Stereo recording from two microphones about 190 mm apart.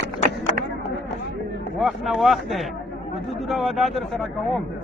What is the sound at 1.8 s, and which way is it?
A man's voice, centre (ahead or behind).